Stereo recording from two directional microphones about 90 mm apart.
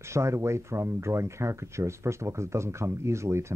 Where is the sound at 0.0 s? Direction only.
30° right (ahead or behind).